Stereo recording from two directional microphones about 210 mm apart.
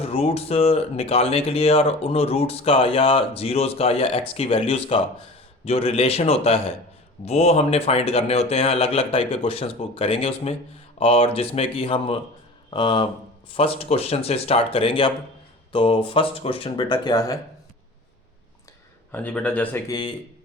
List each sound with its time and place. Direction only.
0.0 s speech: 30° left (ahead or behind)
19.1 s speech: 5° left (ahead or behind)
19.9 s speech: 20° left (ahead or behind)